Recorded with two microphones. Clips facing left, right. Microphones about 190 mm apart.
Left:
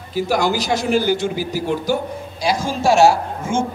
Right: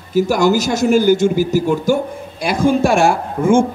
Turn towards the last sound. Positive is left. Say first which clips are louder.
# right 8 dB
turn(degrees=-55)  # may be behind; listen again after turning